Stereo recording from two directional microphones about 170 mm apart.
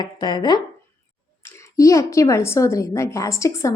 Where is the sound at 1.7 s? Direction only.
20° left (ahead or behind).